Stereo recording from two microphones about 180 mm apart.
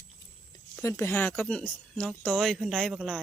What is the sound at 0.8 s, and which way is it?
Speech, 15° left (ahead or behind).